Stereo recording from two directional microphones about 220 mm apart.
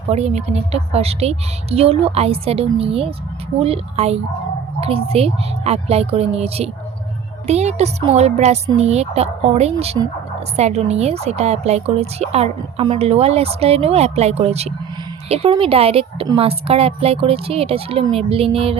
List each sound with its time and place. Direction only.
0.1 s a woman's voice: 30° right (ahead or behind)